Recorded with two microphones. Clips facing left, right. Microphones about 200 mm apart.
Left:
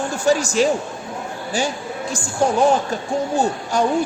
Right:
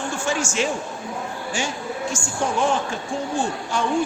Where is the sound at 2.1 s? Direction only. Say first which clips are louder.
Left 7 dB; 35° left (ahead or behind).